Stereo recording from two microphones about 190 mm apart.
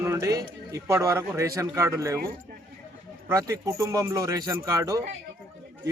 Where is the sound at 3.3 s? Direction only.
15° right (ahead or behind).